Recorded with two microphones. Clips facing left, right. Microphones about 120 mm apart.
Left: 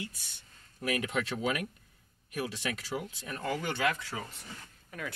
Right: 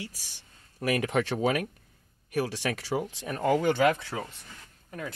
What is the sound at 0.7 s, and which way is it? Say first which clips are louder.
Speech: right 6 dB; 60° right (ahead or behind).